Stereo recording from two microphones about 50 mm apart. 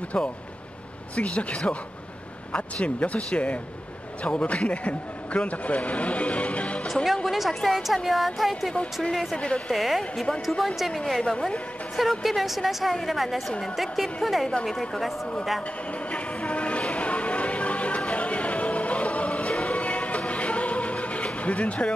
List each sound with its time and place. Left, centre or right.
0.1 s a man's voice: centre
7.2 s a woman's voice: centre
11.1 s a woman's voice: centre
12.0 s a woman's voice: centre
13.5 s a woman's voice: centre
13.7 s a woman's voice: centre
15.9 s music: left